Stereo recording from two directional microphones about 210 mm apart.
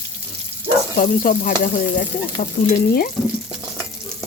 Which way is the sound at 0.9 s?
40° left (ahead or behind).